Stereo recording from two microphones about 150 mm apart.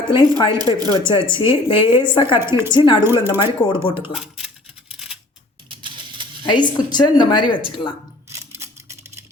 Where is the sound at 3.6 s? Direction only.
35° left (ahead or behind).